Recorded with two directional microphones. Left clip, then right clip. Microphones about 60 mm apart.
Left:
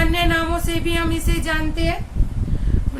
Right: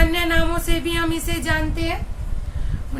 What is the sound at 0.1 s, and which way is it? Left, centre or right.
Music, right.